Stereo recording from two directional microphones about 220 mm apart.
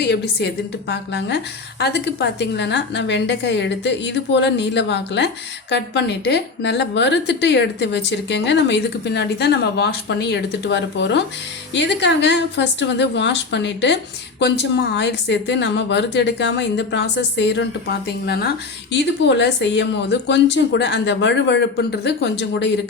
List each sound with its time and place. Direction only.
0.0 s a woman's voice: 50° left (ahead or behind)